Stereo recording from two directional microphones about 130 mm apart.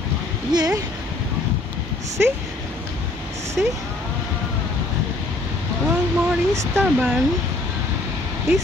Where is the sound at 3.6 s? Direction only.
10° right (ahead or behind).